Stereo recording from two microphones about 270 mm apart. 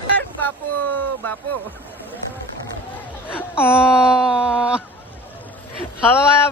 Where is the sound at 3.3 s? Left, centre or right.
Centre.